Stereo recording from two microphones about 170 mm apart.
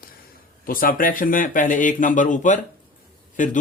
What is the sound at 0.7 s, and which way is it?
Speech, 55° left (ahead or behind).